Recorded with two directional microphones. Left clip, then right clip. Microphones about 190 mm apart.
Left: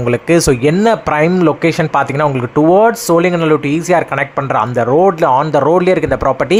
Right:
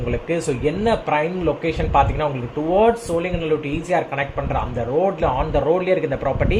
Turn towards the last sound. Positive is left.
turn(degrees=30)  # may be behind; listen again after turning